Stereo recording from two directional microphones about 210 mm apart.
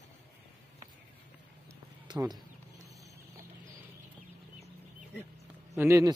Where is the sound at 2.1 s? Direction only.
20° right (ahead or behind).